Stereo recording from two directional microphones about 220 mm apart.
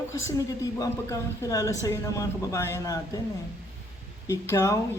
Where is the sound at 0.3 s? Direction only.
15° left (ahead or behind).